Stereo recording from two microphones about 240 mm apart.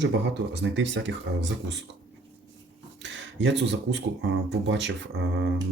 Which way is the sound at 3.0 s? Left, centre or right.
Right.